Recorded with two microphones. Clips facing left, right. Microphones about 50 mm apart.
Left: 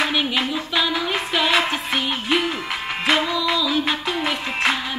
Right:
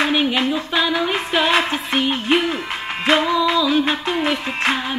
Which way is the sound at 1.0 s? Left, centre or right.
Centre.